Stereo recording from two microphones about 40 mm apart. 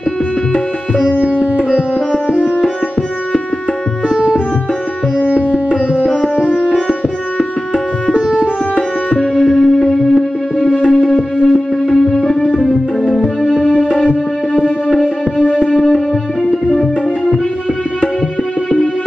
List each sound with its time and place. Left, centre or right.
6.9 s music: left
9.5 s music: centre
10.7 s music: left
13.4 s music: centre
15.6 s music: centre